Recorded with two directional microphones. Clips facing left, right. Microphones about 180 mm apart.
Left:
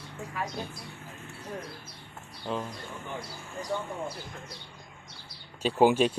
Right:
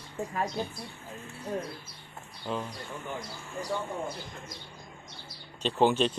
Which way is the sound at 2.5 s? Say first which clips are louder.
Left 1 dB; centre (ahead or behind).